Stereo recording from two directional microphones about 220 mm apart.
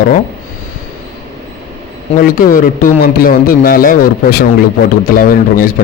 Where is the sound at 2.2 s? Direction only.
40° left (ahead or behind).